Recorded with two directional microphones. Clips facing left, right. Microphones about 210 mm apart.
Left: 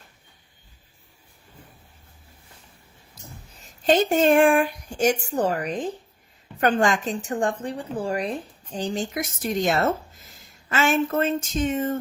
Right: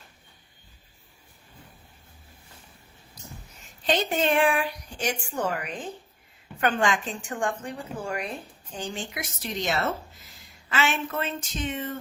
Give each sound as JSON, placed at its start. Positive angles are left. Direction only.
{"t": 3.6, "sound": "a woman's voice", "side_deg": 45}